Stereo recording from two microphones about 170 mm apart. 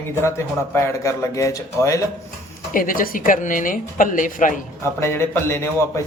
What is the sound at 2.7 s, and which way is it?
A woman's voice, 55° left (ahead or behind).